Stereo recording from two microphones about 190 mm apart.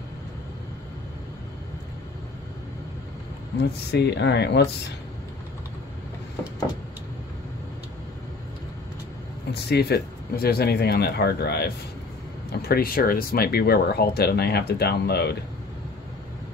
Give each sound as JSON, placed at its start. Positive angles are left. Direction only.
{"t": 3.9, "sound": "speech", "side_deg": 60}
{"t": 9.5, "sound": "speech", "side_deg": 60}